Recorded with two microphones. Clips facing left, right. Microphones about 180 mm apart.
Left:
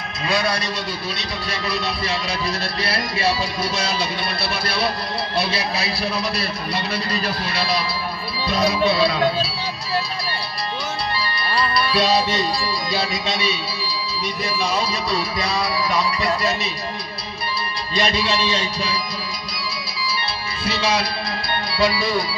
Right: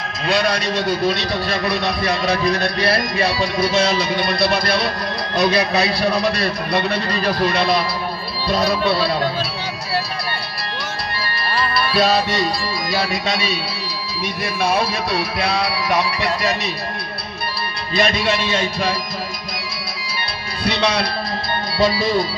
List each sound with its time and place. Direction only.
0.3 s a man's voice: 70° right (ahead or behind)
11.9 s a man's voice: 60° right (ahead or behind)
14.6 s a man's voice: 60° right (ahead or behind)
18.4 s music: 50° right (ahead or behind)
20.6 s speech: 65° right (ahead or behind)